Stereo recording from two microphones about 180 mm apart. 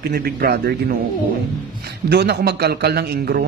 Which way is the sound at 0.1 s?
60° right (ahead or behind).